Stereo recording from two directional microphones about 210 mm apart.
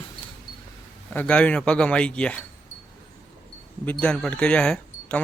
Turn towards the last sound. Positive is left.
turn(degrees=5)  # may be behind; listen again after turning